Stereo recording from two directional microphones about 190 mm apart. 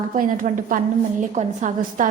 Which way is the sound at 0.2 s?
45° right (ahead or behind).